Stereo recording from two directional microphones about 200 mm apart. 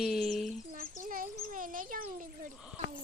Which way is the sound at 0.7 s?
45° right (ahead or behind).